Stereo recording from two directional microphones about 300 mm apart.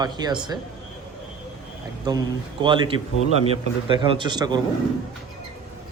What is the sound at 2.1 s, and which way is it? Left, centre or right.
Speech, centre.